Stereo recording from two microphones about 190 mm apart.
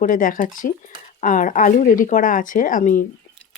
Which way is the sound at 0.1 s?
45° left (ahead or behind).